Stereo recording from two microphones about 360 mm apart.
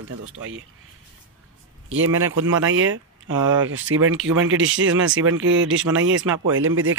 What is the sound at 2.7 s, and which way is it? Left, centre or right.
Speech, right.